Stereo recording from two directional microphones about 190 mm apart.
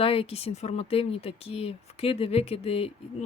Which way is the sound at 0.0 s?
30° left (ahead or behind).